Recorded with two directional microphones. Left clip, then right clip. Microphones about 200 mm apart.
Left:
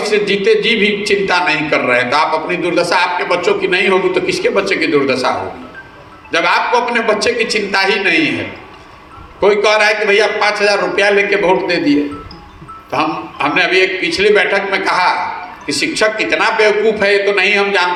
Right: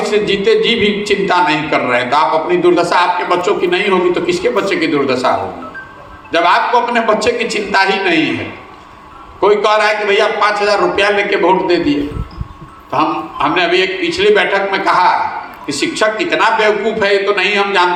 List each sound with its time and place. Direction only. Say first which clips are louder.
0.0 s a man's voice: even; 35° left (ahead or behind)
6.3 s a man's voice: right 2 dB; 35° left (ahead or behind)
9.4 s a man's voice: even; 35° left (ahead or behind)